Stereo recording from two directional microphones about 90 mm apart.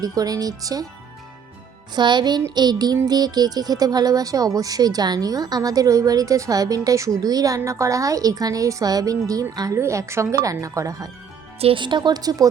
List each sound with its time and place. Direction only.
0.0 s speech: 45° right (ahead or behind)
2.0 s speech: 55° right (ahead or behind); by 11.1 s 40° right (ahead or behind)
11.6 s speech: 70° right (ahead or behind); by 12.5 s 45° right (ahead or behind)